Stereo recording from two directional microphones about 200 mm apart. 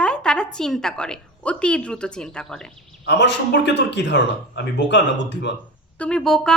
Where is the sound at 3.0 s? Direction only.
60° left (ahead or behind).